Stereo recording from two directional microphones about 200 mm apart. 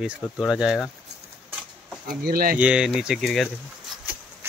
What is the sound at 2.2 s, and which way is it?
Speech, 50° right (ahead or behind).